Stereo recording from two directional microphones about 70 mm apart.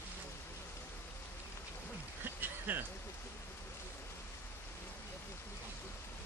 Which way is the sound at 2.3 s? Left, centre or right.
Right.